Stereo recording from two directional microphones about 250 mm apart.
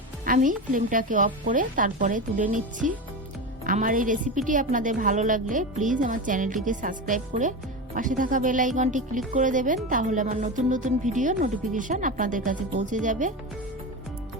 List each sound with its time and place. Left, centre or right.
0.3 s speech: right